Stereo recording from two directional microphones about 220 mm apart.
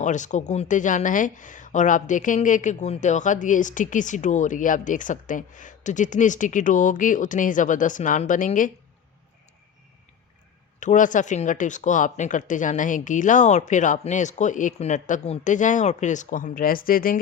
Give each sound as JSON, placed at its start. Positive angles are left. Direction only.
{"t": 0.0, "sound": "speech", "side_deg": 35}
{"t": 10.8, "sound": "speech", "side_deg": 35}